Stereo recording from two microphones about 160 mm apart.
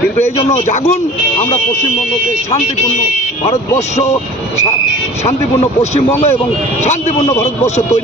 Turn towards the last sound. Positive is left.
turn(degrees=45)  # may be behind; listen again after turning